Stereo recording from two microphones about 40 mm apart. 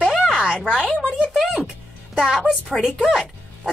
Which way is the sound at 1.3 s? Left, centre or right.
Centre.